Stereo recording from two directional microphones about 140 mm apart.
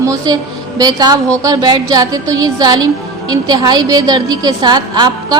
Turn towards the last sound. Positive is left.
turn(degrees=-30)  # may be behind; listen again after turning